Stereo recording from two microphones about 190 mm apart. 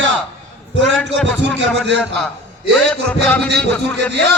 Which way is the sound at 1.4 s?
65° right (ahead or behind).